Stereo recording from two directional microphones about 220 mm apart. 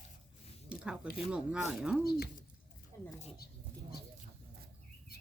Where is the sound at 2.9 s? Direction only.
10° left (ahead or behind).